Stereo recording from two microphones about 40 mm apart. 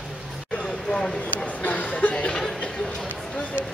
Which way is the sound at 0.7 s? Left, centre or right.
Centre.